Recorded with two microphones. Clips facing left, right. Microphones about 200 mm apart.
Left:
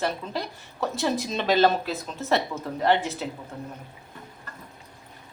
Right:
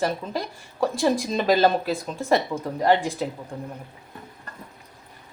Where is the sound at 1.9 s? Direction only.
15° right (ahead or behind).